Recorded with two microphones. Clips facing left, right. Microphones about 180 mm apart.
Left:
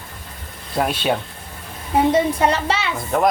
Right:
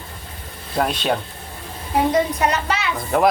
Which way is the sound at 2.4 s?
30° left (ahead or behind).